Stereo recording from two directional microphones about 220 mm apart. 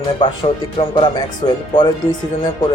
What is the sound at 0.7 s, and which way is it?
Speech, 20° left (ahead or behind).